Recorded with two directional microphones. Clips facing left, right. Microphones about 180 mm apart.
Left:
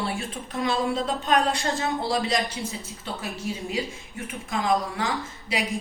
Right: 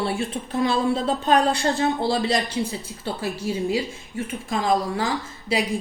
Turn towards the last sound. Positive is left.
turn(degrees=-30)  # may be behind; listen again after turning